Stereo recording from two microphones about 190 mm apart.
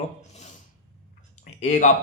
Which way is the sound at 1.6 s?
40° left (ahead or behind).